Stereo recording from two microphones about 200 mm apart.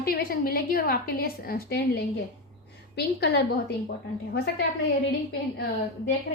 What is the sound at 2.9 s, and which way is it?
A woman's voice, 55° left (ahead or behind).